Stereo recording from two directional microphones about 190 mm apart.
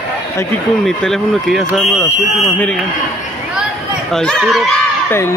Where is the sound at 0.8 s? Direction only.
Centre (ahead or behind).